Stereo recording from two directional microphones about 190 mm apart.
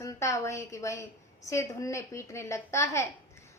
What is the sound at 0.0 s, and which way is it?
A woman's voice, 15° left (ahead or behind).